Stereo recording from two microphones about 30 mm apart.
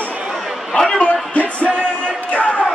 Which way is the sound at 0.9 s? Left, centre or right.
Left.